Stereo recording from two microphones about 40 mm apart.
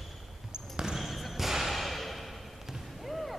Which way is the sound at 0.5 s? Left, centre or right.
Centre.